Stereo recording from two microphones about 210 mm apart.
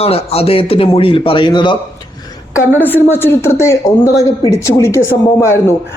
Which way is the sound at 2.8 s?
10° left (ahead or behind).